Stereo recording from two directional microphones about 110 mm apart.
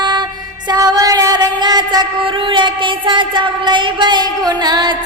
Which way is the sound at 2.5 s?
45° right (ahead or behind).